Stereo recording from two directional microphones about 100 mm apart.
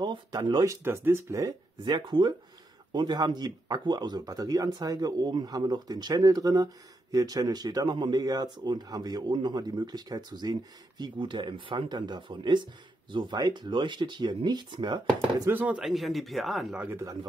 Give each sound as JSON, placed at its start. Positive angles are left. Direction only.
{"t": 0.0, "sound": "speech", "side_deg": -45}
{"t": 0.8, "sound": "speech", "side_deg": -25}
{"t": 15.5, "sound": "speech", "side_deg": -15}
{"t": 15.8, "sound": "speech", "side_deg": 0}
{"t": 16.9, "sound": "speech", "side_deg": -35}